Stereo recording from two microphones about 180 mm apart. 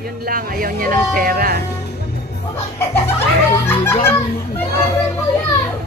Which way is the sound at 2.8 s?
15° left (ahead or behind).